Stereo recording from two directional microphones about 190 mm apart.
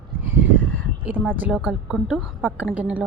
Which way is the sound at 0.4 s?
80° right.